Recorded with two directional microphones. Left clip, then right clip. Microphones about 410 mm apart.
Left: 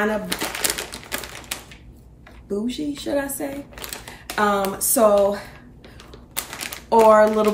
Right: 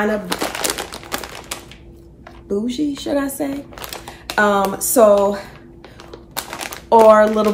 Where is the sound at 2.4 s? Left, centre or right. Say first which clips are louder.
Right 5 dB; centre.